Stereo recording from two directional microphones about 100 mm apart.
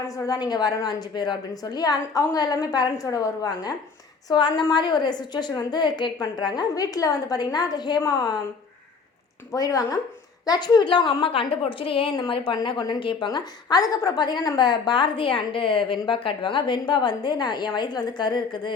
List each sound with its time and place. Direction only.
0.3 s a woman's voice: 45° left (ahead or behind)
4.3 s a woman's voice: 50° left (ahead or behind)
9.5 s a woman's voice: 35° left (ahead or behind); by 12.5 s 55° left (ahead or behind)
12.5 s a woman's voice: 45° left (ahead or behind)